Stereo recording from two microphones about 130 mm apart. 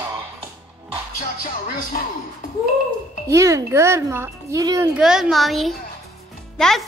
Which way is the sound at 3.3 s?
25° right (ahead or behind).